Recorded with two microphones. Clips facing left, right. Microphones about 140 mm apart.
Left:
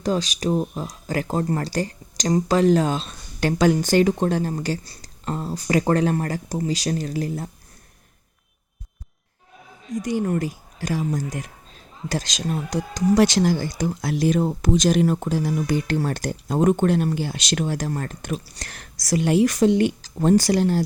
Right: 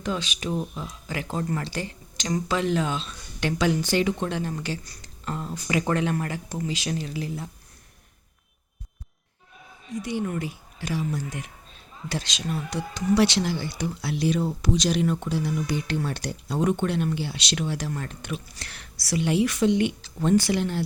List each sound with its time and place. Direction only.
0.0 s speech: 40° left (ahead or behind)
9.9 s speech: 45° left (ahead or behind)